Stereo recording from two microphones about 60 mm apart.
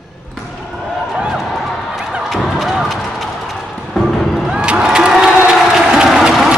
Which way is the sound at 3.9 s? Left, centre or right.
Centre.